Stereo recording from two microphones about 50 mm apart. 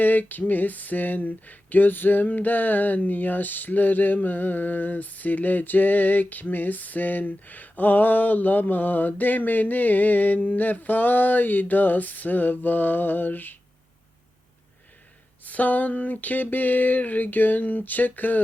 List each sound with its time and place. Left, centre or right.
0.0 s speech: left
15.4 s speech: left